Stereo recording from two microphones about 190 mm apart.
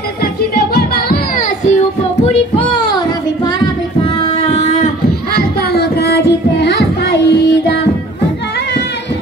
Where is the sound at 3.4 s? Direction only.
25° left (ahead or behind).